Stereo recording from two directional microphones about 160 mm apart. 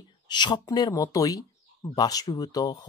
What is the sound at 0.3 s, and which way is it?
Speech, 25° left (ahead or behind).